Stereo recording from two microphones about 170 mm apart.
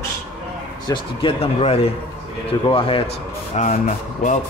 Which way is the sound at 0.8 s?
30° left (ahead or behind).